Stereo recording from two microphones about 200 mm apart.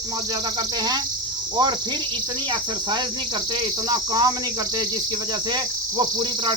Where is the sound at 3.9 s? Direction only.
20° right (ahead or behind).